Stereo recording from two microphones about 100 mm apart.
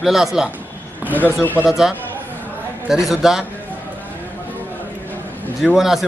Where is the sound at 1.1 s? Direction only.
20° left (ahead or behind).